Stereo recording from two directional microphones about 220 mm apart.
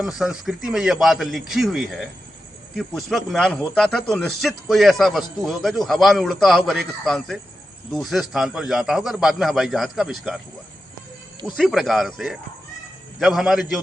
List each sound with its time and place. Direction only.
0.0 s speech: centre (ahead or behind)
11.5 s speech: centre (ahead or behind)